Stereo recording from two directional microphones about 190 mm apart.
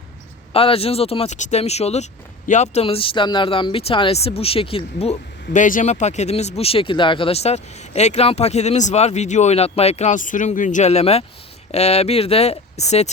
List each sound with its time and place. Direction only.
0.5 s speech: 30° left (ahead or behind)
5.5 s speech: 40° left (ahead or behind)